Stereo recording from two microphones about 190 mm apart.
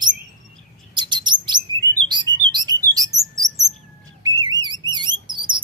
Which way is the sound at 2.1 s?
25° right (ahead or behind).